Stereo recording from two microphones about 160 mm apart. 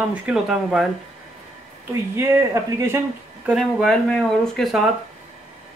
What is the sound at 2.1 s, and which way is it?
Speech, 20° right (ahead or behind).